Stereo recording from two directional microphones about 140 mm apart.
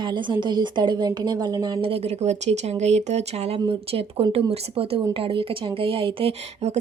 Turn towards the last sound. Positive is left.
turn(degrees=-50)  # may be behind; listen again after turning